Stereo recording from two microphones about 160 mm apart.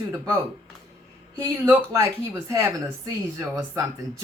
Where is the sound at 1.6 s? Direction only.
20° right (ahead or behind).